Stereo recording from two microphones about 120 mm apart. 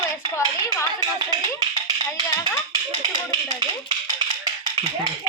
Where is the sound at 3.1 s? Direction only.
40° right (ahead or behind).